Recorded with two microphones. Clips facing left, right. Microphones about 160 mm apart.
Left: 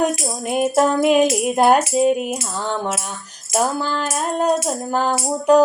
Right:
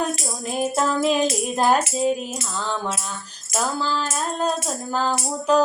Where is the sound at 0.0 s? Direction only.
15° left (ahead or behind).